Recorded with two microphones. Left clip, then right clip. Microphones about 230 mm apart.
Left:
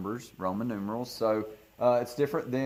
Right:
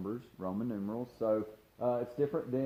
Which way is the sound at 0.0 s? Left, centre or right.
Left.